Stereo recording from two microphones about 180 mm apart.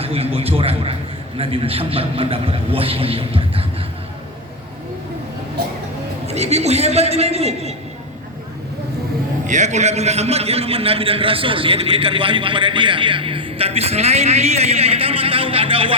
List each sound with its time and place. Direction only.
0.0 s a man's voice: 30° right (ahead or behind)
6.2 s a man's voice: 35° right (ahead or behind)
9.5 s a man's voice: 40° right (ahead or behind)